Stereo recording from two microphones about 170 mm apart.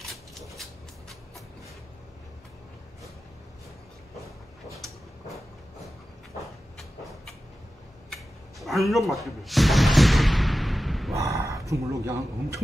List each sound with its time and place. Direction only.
6.8 s vehicle: centre (ahead or behind)
8.1 s a sound: centre (ahead or behind)
11.1 s speech: 20° right (ahead or behind)